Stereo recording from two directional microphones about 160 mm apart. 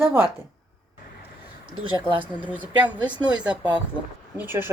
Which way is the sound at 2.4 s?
10° right (ahead or behind).